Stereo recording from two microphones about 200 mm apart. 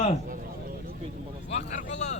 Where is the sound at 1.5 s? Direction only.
35° left (ahead or behind).